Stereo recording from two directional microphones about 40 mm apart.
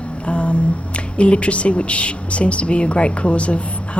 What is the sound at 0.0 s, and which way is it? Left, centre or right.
Speech, left.